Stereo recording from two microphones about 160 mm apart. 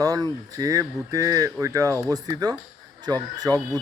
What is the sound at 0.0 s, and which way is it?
Speech, 25° right (ahead or behind).